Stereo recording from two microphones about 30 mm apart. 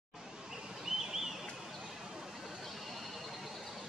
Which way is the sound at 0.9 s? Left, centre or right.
Centre.